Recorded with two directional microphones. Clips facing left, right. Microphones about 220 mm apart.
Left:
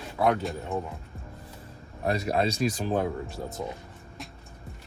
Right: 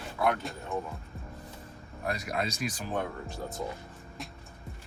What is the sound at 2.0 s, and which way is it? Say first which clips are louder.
Speech: left 7 dB; 30° left (ahead or behind).